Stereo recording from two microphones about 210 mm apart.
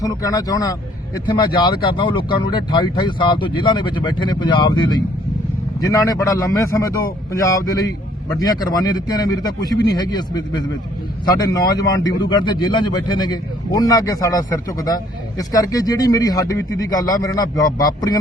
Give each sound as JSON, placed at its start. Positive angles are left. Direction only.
{"t": 0.0, "sound": "speech", "side_deg": 15}
{"t": 11.8, "sound": "speech", "side_deg": 20}